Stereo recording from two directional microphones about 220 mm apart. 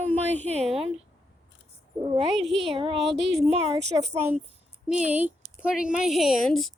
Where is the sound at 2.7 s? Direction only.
25° right (ahead or behind).